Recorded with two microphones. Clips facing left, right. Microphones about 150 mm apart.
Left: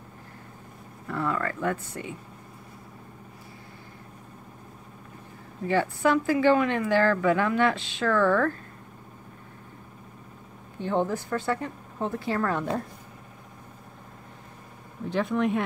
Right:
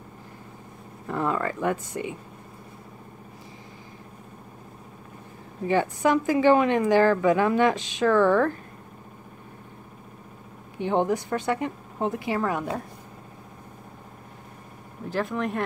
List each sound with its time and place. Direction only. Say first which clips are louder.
1.0 s speech: right 2 dB; 20° right (ahead or behind)
5.7 s speech: right 1 dB; 15° right (ahead or behind)
10.8 s speech: right 3 dB; 20° right (ahead or behind)
15.0 s speech: left 2 dB; centre (ahead or behind)